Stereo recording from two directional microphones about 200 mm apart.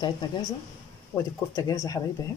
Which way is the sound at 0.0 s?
20° left (ahead or behind).